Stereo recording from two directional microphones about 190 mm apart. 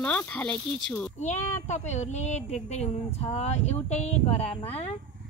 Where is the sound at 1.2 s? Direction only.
40° left (ahead or behind).